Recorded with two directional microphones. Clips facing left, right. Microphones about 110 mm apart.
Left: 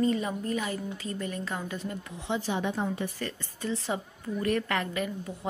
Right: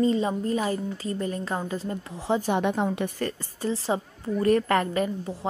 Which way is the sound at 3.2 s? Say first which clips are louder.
Right 6 dB; 40° right (ahead or behind).